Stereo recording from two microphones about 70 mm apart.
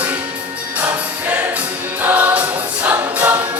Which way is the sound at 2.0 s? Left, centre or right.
Right.